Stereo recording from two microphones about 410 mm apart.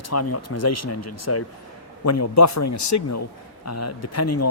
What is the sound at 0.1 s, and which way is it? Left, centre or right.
Speech, left.